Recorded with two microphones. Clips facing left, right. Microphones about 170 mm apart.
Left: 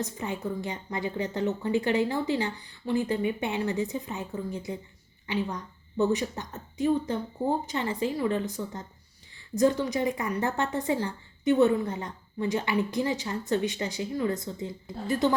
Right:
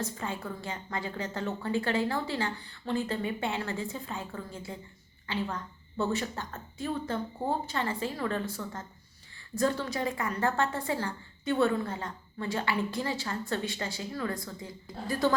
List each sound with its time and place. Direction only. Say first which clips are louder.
0.0 s a woman's voice: left 3 dB; 20° left (ahead or behind)